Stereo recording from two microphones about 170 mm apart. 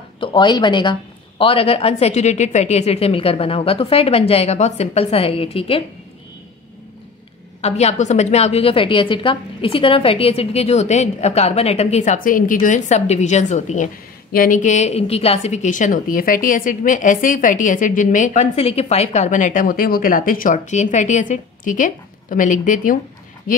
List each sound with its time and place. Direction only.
0.2 s a woman's voice: 30° left (ahead or behind)
7.6 s a woman's voice: 40° left (ahead or behind)